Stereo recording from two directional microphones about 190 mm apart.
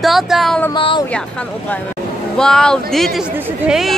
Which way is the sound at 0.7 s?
25° left (ahead or behind).